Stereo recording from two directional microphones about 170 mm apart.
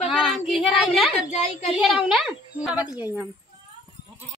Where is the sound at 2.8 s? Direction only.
20° left (ahead or behind).